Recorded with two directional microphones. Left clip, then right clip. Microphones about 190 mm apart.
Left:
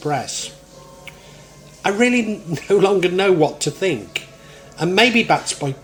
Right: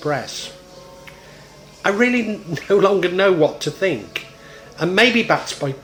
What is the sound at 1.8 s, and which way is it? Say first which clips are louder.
Speech: even; 25° left (ahead or behind).